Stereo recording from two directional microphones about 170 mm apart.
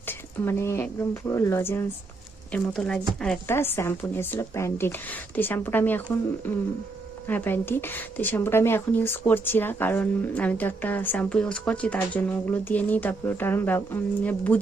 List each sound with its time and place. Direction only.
0.1 s a woman's voice: 15° left (ahead or behind)